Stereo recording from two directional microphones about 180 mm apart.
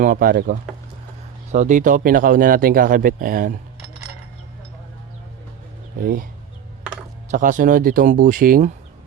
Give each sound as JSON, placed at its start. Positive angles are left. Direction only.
{"t": 0.0, "sound": "speech", "side_deg": -50}
{"t": 6.0, "sound": "speech", "side_deg": -55}
{"t": 7.3, "sound": "speech", "side_deg": -45}